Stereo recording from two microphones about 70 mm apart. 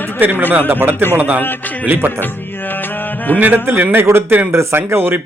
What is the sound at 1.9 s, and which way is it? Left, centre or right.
Speech, right.